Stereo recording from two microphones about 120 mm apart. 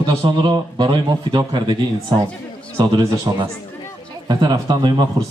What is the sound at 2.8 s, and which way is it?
Speech, 30° right (ahead or behind).